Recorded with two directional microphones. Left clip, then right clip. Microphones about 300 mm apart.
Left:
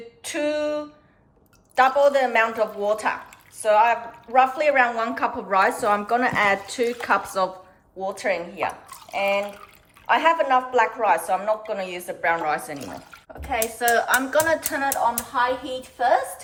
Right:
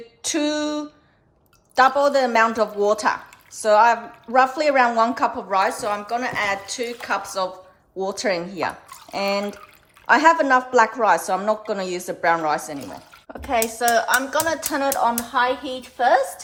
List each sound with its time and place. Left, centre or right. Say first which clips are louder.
0.2 s a sound: right 1 dB; centre
1.7 s speech: right 1 dB; centre
7.9 s speech: right 2 dB; centre
9.1 s speech: left 1 dB; right
10.1 s speech: right 3 dB; centre